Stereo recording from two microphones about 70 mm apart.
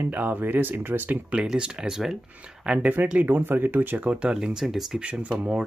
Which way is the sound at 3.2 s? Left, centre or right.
Right.